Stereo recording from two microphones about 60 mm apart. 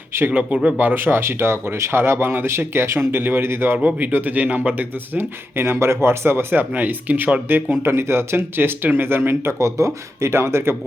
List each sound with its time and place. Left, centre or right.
0.1 s speech: right
0.3 s speech: right
3.8 s speech: right
5.6 s speech: right
6.7 s speech: right
7.8 s speech: right
9.6 s speech: right